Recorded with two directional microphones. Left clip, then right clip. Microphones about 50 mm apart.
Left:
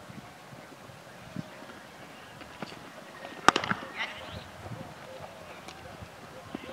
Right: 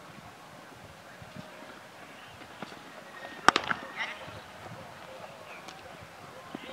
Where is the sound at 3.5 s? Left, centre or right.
Centre.